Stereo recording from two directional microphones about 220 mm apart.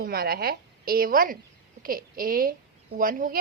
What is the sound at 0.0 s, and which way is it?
A woman's voice, 45° right (ahead or behind).